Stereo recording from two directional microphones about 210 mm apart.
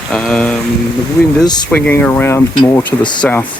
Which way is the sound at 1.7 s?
5° left (ahead or behind).